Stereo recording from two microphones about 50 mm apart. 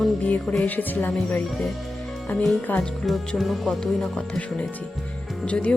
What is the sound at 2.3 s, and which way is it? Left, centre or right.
Music, left.